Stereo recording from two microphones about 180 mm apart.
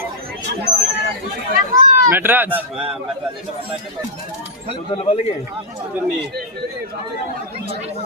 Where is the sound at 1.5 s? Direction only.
45° right (ahead or behind).